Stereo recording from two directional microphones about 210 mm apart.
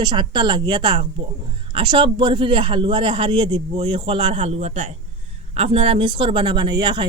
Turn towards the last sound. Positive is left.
turn(degrees=-20)  # may be behind; listen again after turning